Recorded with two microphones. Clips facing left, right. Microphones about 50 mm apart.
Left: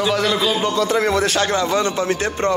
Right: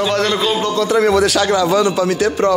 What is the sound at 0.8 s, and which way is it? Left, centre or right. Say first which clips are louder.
Speech: right 7 dB; left.